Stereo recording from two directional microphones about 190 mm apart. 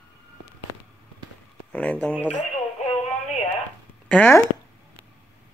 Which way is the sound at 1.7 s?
5° left (ahead or behind).